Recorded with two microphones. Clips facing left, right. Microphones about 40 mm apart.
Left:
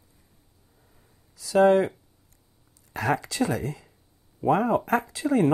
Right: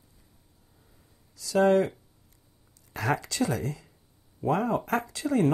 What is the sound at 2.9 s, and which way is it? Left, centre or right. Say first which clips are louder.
Speech: left 3 dB; centre.